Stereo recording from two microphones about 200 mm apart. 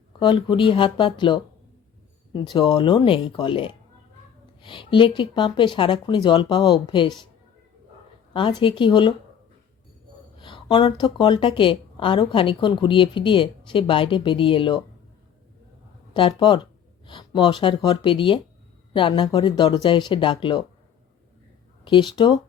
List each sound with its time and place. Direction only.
0.2 s a woman's voice: 25° left (ahead or behind)
8.3 s a woman's voice: 25° left (ahead or behind)
10.3 s a woman's voice: 25° left (ahead or behind)
16.1 s a woman's voice: 25° left (ahead or behind)
21.8 s a woman's voice: 25° left (ahead or behind)